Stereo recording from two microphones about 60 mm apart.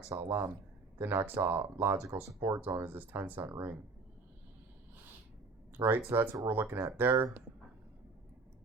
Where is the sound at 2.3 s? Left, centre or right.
Right.